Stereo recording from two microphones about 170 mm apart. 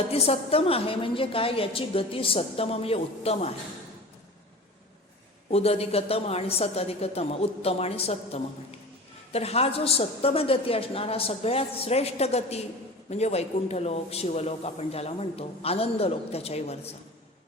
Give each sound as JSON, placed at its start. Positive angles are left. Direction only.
{"t": 0.1, "sound": "a man's voice", "side_deg": 35}
{"t": 5.5, "sound": "a man's voice", "side_deg": 35}